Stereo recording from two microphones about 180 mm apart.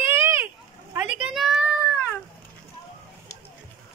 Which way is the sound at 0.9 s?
10° right (ahead or behind).